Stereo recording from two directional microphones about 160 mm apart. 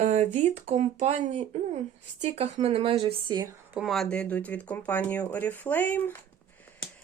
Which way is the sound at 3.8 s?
Centre (ahead or behind).